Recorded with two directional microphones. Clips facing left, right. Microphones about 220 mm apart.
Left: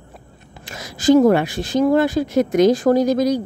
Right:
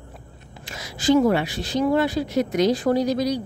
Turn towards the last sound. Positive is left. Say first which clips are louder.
# left 5 dB
turn(degrees=50)  # may be behind; listen again after turning